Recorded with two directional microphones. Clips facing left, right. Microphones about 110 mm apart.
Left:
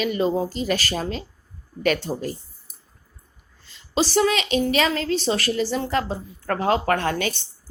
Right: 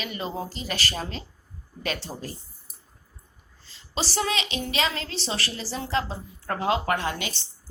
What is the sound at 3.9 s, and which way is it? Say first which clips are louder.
Speech: left 8 dB; 45° left (ahead or behind).